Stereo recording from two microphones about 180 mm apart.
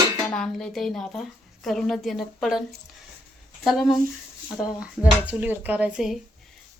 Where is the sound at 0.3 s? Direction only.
5° left (ahead or behind).